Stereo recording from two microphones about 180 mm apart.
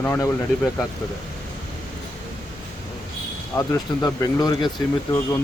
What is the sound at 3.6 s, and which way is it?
Speech, 20° left (ahead or behind).